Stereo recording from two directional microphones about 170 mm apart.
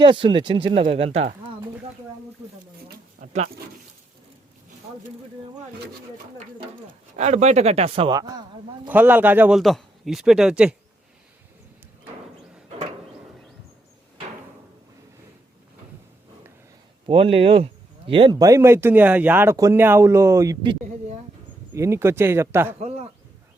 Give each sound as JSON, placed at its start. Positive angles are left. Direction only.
{"t": 0.0, "sound": "speech", "side_deg": -30}
{"t": 3.2, "sound": "a sound", "side_deg": -40}
{"t": 7.2, "sound": "speech", "side_deg": -45}
{"t": 8.1, "sound": "speech", "side_deg": -25}
{"t": 8.9, "sound": "a man's voice", "side_deg": -10}
{"t": 17.1, "sound": "speech", "side_deg": -35}
{"t": 21.7, "sound": "speech", "side_deg": -15}
{"t": 22.8, "sound": "speech", "side_deg": -40}